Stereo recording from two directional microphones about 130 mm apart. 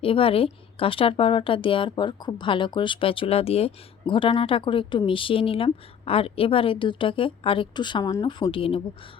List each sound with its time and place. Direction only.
0.0 s a woman's voice: 45° left (ahead or behind)